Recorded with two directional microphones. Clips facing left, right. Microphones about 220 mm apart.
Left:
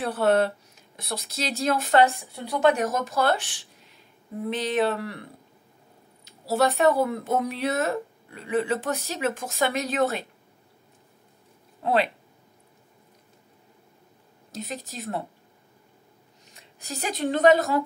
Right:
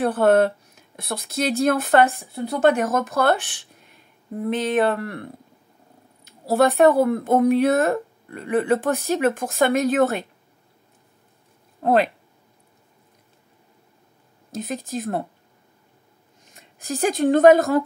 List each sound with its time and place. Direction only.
0.0 s speech: 50° right (ahead or behind)
11.8 s speech: 45° right (ahead or behind)
14.5 s speech: 50° right (ahead or behind)
16.5 s speech: 50° right (ahead or behind)